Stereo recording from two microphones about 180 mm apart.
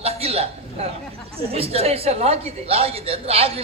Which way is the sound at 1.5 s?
35° right (ahead or behind).